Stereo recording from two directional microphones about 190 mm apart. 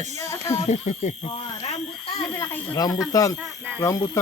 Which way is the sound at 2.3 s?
10° left (ahead or behind).